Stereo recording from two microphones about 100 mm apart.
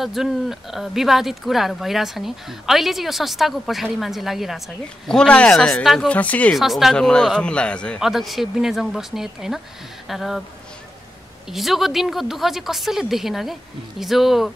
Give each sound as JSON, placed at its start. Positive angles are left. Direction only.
{"t": 0.0, "sound": "speech", "side_deg": -5}
{"t": 6.5, "sound": "speech", "side_deg": 0}
{"t": 8.0, "sound": "speech", "side_deg": 0}
{"t": 11.4, "sound": "speech", "side_deg": 0}